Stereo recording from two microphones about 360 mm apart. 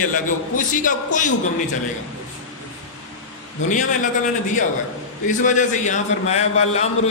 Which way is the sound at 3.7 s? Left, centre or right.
Left.